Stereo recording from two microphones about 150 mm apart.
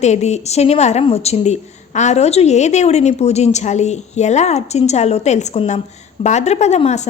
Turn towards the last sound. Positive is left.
turn(degrees=50)  # may be behind; listen again after turning